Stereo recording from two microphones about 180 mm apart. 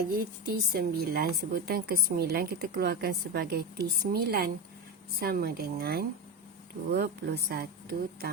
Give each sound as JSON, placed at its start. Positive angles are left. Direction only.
{"t": 0.1, "sound": "speech", "side_deg": -55}